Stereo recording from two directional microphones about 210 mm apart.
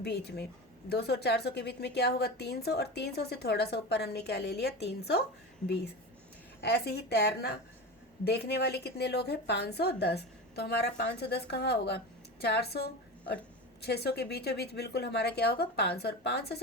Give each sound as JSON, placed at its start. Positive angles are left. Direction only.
{"t": 0.0, "sound": "a woman's voice", "side_deg": 50}
{"t": 6.6, "sound": "a woman's voice", "side_deg": 50}